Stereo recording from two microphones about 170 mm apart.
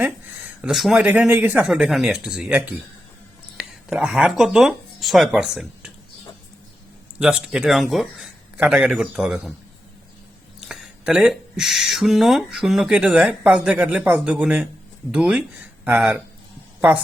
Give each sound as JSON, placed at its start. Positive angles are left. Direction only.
{"t": 0.6, "sound": "speech", "side_deg": 0}
{"t": 7.2, "sound": "speech", "side_deg": -5}
{"t": 10.6, "sound": "speech", "side_deg": -5}